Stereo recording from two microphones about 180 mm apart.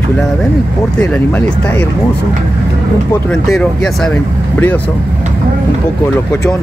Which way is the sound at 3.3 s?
5° left (ahead or behind).